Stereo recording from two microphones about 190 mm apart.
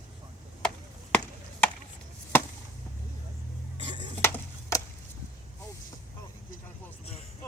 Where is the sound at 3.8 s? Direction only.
25° right (ahead or behind).